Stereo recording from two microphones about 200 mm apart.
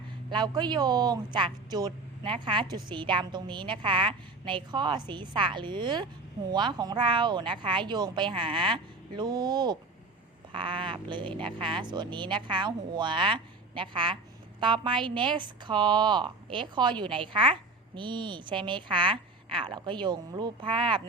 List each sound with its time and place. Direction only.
0.3 s speech: 20° right (ahead or behind)